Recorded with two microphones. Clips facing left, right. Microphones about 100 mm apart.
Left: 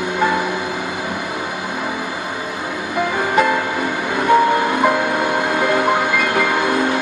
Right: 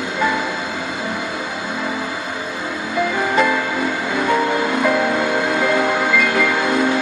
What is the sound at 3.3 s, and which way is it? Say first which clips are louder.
Music: left 3 dB; 20° left (ahead or behind).